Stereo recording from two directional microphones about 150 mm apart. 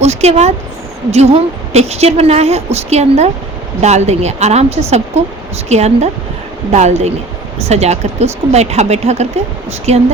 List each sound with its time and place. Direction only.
0.0 s a woman's voice: 45° right (ahead or behind)